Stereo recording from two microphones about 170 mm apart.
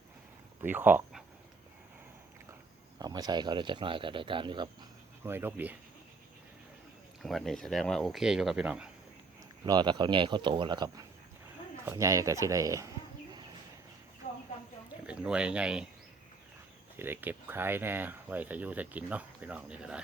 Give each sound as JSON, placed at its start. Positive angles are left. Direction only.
{"t": 0.6, "sound": "speech", "side_deg": -10}
{"t": 3.0, "sound": "speech", "side_deg": -25}
{"t": 5.2, "sound": "speech", "side_deg": -15}
{"t": 7.2, "sound": "speech", "side_deg": 0}
{"t": 9.6, "sound": "speech", "side_deg": -25}
{"t": 14.2, "sound": "a sound", "side_deg": 45}
{"t": 15.0, "sound": "speech", "side_deg": -5}
{"t": 17.0, "sound": "speech", "side_deg": -10}